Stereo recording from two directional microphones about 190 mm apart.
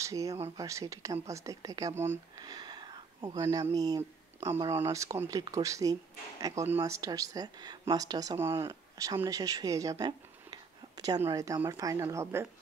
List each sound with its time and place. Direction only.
0.0 s speech: 15° right (ahead or behind)